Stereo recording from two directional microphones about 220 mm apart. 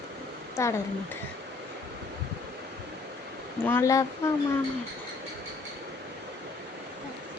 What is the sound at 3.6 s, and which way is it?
Speech, 10° left (ahead or behind).